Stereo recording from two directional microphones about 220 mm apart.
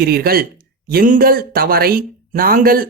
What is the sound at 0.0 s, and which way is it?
Speech, 45° right (ahead or behind).